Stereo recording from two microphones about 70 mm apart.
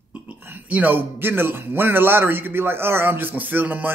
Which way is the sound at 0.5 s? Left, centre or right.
Right.